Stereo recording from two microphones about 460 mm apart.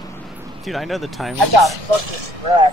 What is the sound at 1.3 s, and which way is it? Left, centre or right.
Speech, right.